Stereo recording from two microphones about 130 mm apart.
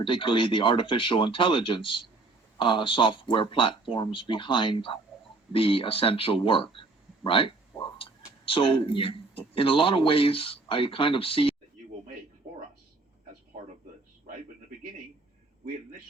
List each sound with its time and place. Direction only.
0.0 s speech: 40° left (ahead or behind)
7.9 s a sound: 45° left (ahead or behind)
9.6 s speech: 45° left (ahead or behind)